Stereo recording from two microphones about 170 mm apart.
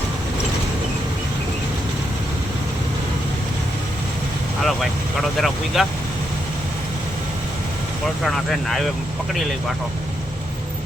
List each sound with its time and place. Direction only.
4.6 s speech: centre (ahead or behind)
8.2 s speech: centre (ahead or behind)